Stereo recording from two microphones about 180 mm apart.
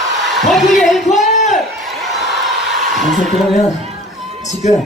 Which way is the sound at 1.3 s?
40° left (ahead or behind).